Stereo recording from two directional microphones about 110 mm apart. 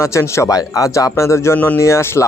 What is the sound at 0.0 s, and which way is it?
Speech, 25° left (ahead or behind).